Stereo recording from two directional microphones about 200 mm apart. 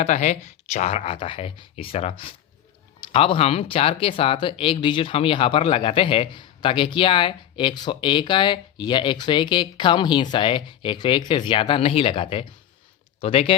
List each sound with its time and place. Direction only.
0.0 s speech: 35° left (ahead or behind)